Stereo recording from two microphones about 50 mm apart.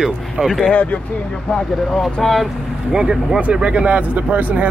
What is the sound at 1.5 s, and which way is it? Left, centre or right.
Speech, centre.